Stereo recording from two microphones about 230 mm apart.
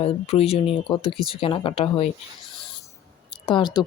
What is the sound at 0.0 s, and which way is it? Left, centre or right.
Speech, left.